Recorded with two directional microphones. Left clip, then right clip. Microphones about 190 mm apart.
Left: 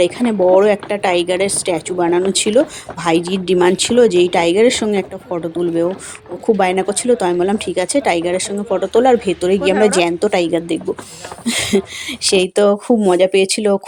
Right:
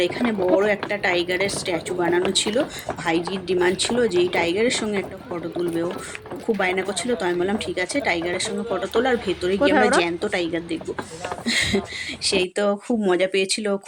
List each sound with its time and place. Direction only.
0.0 s speech: 35° left (ahead or behind)
6.6 s speech: 30° left (ahead or behind)